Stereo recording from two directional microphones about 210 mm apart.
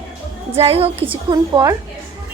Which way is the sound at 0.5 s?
30° right (ahead or behind).